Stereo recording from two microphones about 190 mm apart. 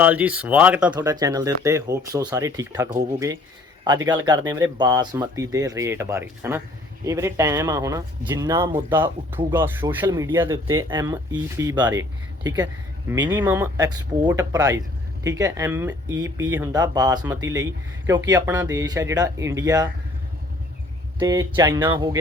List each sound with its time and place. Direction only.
0.0 s speech: 5° right (ahead or behind)
0.9 s speech: 20° right (ahead or behind)
21.2 s speech: 20° right (ahead or behind)